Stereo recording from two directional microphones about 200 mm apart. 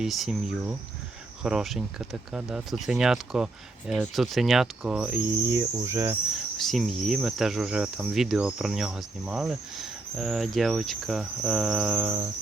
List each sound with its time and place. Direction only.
0.0 s speech: centre (ahead or behind)
6.6 s speech: centre (ahead or behind)